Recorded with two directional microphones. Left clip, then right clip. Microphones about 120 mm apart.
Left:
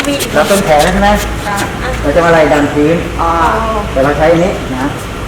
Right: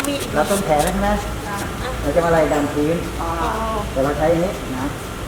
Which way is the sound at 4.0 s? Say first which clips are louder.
Left 9 dB; 5° left (ahead or behind).